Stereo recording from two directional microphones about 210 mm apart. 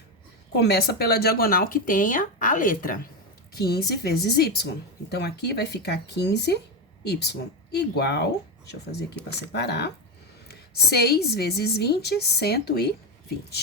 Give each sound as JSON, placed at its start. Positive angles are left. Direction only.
{"t": 0.5, "sound": "speech", "side_deg": 50}